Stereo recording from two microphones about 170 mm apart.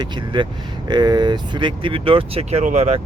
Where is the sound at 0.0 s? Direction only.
30° right (ahead or behind).